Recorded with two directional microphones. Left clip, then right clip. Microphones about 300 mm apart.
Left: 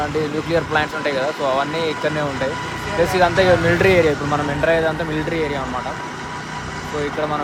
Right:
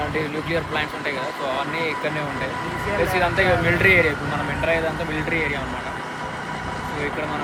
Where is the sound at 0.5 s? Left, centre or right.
Centre.